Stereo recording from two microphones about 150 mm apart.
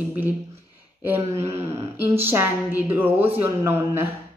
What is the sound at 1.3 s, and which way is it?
Speech, 20° right (ahead or behind).